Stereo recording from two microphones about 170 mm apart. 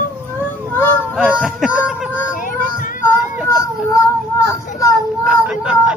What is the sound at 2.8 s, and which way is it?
Child singing, 50° left (ahead or behind).